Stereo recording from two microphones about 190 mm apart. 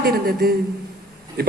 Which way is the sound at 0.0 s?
55° right (ahead or behind).